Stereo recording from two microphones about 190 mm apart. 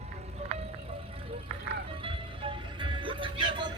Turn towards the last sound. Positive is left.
turn(degrees=-25)  # may be behind; listen again after turning